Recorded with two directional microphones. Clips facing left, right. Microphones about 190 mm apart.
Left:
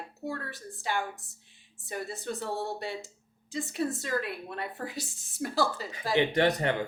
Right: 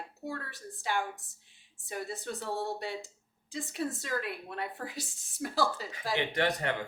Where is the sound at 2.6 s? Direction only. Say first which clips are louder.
Left 1 dB; 10° right (ahead or behind).